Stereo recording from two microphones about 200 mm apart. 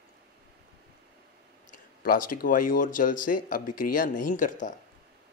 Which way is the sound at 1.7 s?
45° left (ahead or behind).